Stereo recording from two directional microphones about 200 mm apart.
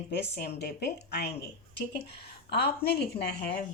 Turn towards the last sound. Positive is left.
turn(degrees=50)  # may be behind; listen again after turning